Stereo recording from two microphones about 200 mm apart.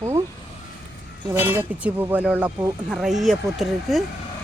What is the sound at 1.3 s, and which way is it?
Speech, 10° right (ahead or behind).